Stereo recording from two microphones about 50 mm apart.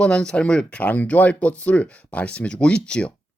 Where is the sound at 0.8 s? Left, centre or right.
Left.